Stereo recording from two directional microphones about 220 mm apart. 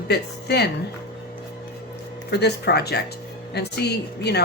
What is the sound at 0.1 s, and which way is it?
Speech, 45° left (ahead or behind).